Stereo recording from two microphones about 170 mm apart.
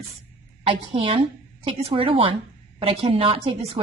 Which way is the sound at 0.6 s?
30° right (ahead or behind).